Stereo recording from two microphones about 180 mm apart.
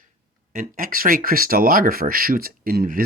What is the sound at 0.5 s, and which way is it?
Speech, 50° right (ahead or behind).